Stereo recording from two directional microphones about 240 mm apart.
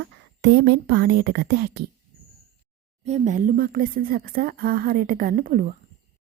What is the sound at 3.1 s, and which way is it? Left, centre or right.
A woman's voice, right.